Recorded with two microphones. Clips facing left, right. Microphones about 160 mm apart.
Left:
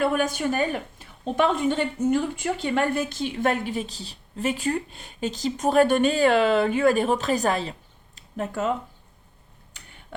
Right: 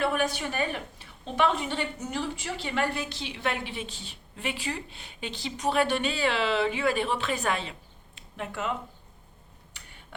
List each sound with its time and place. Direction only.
0.0 s a woman's voice: 45° left (ahead or behind)